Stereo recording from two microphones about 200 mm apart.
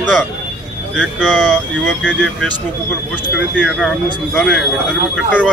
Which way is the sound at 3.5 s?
5° left (ahead or behind).